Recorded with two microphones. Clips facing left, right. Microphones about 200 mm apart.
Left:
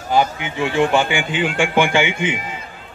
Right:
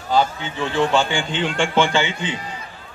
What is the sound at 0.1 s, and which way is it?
Speech, 15° left (ahead or behind).